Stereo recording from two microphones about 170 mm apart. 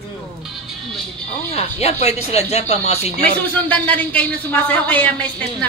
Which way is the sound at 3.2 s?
10° left (ahead or behind).